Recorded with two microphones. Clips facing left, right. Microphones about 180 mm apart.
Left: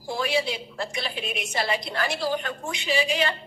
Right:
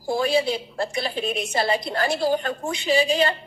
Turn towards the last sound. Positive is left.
turn(degrees=-40)  # may be behind; listen again after turning